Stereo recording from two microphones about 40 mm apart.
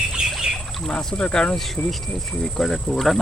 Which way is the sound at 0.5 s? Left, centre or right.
Centre.